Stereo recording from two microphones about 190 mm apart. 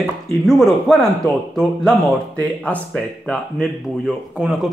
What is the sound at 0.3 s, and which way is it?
Speech, centre (ahead or behind).